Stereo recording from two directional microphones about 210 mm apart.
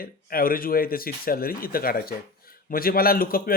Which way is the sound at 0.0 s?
45° left (ahead or behind).